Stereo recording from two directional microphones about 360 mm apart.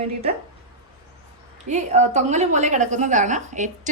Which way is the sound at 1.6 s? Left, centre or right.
Centre.